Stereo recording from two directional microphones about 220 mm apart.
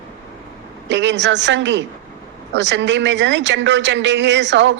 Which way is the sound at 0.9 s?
55° right (ahead or behind).